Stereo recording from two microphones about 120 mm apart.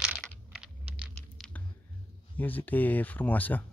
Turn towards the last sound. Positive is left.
turn(degrees=15)  # may be behind; listen again after turning